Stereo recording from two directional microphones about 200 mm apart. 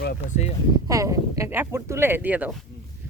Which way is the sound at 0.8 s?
15° right (ahead or behind).